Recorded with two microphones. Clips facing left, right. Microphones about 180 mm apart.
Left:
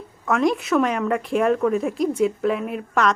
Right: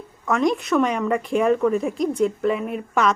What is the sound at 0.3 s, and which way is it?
Speech, centre (ahead or behind).